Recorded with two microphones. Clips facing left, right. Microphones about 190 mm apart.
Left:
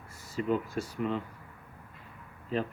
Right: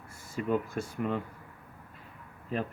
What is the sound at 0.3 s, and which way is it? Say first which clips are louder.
Speech: even; 50° right (ahead or behind).